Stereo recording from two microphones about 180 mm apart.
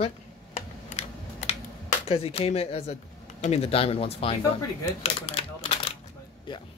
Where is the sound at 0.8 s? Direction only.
40° left (ahead or behind).